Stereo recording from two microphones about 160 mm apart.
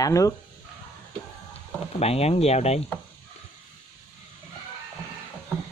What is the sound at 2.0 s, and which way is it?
Speech, 40° left (ahead or behind).